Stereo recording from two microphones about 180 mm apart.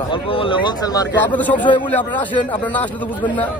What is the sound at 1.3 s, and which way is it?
A man's voice, 10° left (ahead or behind).